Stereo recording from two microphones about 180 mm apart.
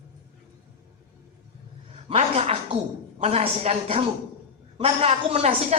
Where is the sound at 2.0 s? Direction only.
35° right (ahead or behind).